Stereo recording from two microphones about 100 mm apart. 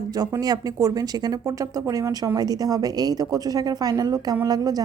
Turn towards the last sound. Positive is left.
turn(degrees=-40)  # may be behind; listen again after turning